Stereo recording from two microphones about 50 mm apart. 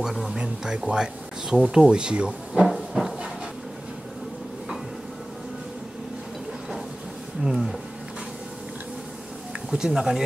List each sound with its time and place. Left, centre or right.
0.0 s speech: centre
0.4 s speech: centre
2.6 s a sound: centre
7.4 s speech: centre
9.7 s speech: centre